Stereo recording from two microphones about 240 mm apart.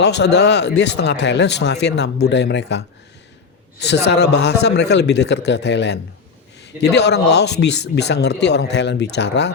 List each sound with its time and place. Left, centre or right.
0.2 s speech: left
3.8 s speech: left
6.7 s a man's voice: centre
7.1 s speech: left